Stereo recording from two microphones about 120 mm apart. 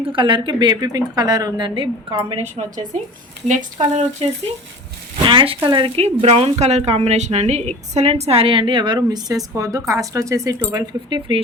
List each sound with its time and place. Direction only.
0.0 s a woman's voice: 45° right (ahead or behind)
2.4 s a woman's voice: 70° right (ahead or behind)
3.4 s speech: 90° right
5.2 s speech: 45° right (ahead or behind)
6.0 s speech: 60° right (ahead or behind); by 11.2 s 30° right (ahead or behind)